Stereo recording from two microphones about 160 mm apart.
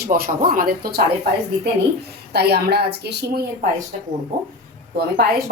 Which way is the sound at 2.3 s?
90° right.